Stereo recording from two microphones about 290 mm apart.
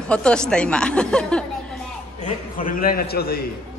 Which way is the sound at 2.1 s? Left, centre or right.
Left.